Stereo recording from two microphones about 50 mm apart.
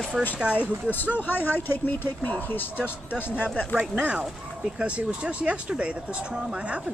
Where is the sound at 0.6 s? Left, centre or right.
Left.